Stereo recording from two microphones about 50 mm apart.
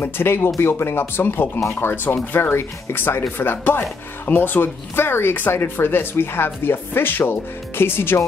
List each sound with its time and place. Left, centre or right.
0.0 s speech: left